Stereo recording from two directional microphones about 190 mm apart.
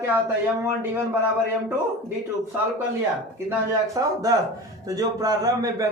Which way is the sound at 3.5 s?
20° right (ahead or behind).